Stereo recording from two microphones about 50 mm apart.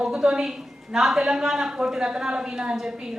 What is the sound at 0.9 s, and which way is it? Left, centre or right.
A woman's voice, centre.